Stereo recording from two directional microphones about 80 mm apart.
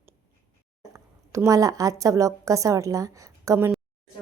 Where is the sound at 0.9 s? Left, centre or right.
Right.